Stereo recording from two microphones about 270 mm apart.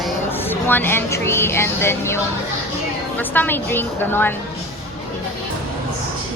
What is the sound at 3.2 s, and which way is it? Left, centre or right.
Speech, centre.